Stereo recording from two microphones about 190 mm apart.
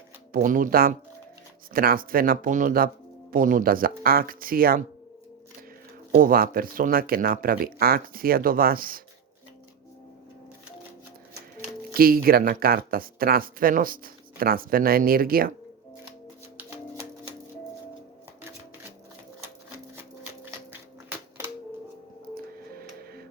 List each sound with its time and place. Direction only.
0.3 s speech: 45° right (ahead or behind)
6.1 s speech: 50° right (ahead or behind)
11.9 s speech: 50° right (ahead or behind)
16.6 s music: 15° right (ahead or behind)